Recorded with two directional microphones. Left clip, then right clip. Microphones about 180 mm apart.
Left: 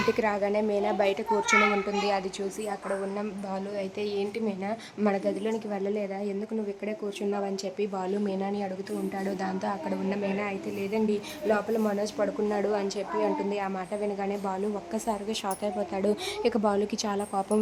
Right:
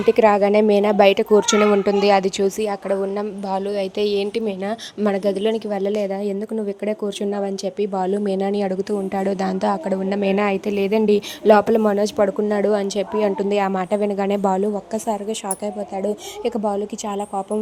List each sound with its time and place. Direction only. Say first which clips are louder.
0.1 s a child's voice: right 15 dB; 45° right (ahead or behind)
3.2 s a woman's voice: right 10 dB; 30° right (ahead or behind)
14.9 s a woman's voice: right 7 dB; 20° right (ahead or behind)
16.0 s a woman's voice: right 4 dB; 5° right (ahead or behind)